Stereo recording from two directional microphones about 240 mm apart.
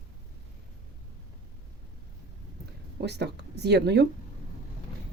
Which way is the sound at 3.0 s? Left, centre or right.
Right.